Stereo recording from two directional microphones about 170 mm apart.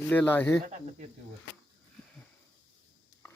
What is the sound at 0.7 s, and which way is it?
Speech, 45° right (ahead or behind).